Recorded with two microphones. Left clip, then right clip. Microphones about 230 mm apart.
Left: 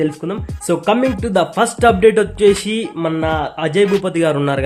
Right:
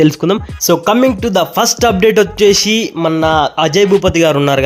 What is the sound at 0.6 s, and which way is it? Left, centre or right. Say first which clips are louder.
Speech: right 4 dB; right.